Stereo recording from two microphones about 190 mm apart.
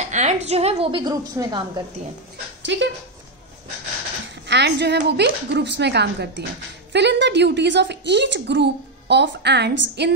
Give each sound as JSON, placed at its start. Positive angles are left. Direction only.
{"t": 0.0, "sound": "a woman's voice", "side_deg": -40}
{"t": 2.6, "sound": "speech", "side_deg": -70}
{"t": 4.5, "sound": "a woman's voice", "side_deg": -60}